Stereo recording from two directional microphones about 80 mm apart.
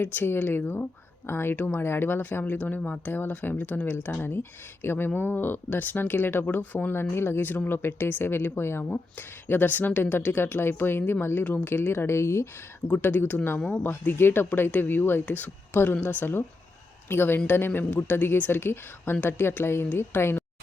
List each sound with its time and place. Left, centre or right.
0.0 s speech: left
12.9 s speech: left